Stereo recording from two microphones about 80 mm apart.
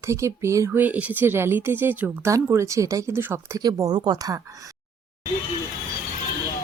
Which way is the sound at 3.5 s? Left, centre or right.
Right.